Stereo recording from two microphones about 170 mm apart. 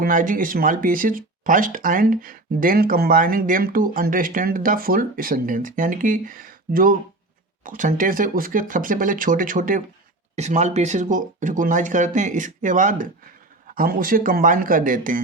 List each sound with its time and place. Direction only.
0.0 s speech: 55° right (ahead or behind)
10.3 s speech: 40° right (ahead or behind)